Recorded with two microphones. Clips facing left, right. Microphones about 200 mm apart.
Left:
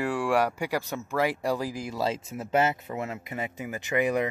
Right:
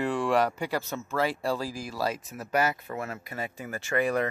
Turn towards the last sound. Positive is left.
turn(degrees=20)  # may be behind; listen again after turning